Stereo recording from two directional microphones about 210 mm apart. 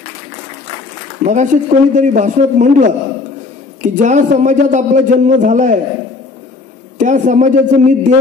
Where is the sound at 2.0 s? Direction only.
35° right (ahead or behind).